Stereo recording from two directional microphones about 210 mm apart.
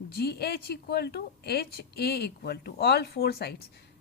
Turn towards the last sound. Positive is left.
turn(degrees=50)  # may be behind; listen again after turning